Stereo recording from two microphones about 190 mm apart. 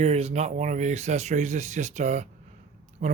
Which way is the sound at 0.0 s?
35° right (ahead or behind).